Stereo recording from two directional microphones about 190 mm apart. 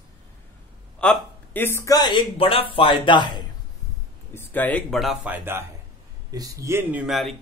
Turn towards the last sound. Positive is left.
turn(degrees=0)  # may be behind; listen again after turning